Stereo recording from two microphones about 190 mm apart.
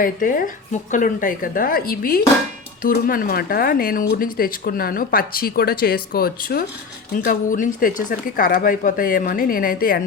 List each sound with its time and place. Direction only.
0.0 s speech: 45° left (ahead or behind)